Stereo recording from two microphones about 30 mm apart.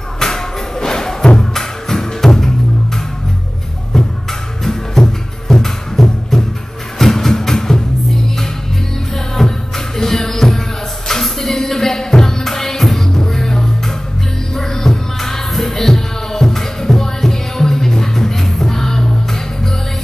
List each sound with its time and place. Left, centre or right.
0.2 s music: centre
3.9 s music: centre
9.1 s music: centre